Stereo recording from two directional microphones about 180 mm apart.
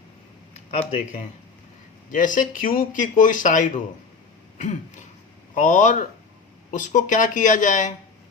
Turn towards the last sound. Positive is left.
turn(degrees=45)  # may be behind; listen again after turning